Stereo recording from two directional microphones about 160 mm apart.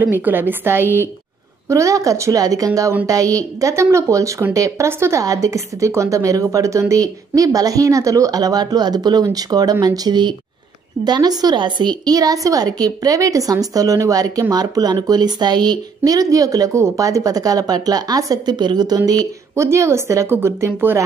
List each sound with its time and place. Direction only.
0.0 s a woman's voice: 10° right (ahead or behind)